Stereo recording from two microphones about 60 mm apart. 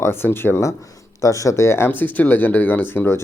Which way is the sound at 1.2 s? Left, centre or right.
Left.